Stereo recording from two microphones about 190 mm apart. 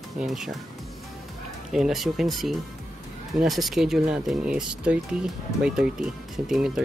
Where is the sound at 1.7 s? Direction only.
Centre (ahead or behind).